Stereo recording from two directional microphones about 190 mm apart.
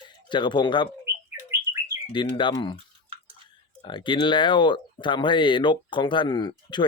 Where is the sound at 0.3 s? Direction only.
25° left (ahead or behind).